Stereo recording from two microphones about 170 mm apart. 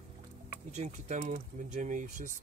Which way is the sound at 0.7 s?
45° right (ahead or behind).